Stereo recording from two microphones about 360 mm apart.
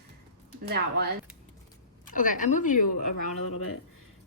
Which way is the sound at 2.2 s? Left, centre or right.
Left.